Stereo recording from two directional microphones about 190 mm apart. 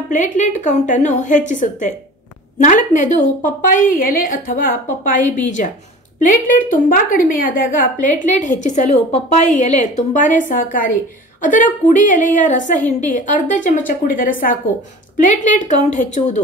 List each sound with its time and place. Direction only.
0.1 s a woman's voice: 40° left (ahead or behind)